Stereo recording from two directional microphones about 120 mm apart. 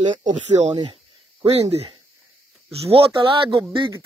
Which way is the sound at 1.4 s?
55° right (ahead or behind).